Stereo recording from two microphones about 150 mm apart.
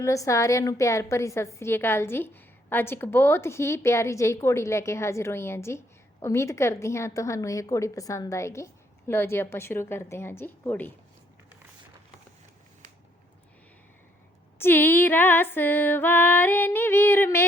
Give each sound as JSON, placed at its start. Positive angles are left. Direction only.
{"t": 0.0, "sound": "a woman's voice", "side_deg": 20}
{"t": 14.6, "sound": "music", "side_deg": 15}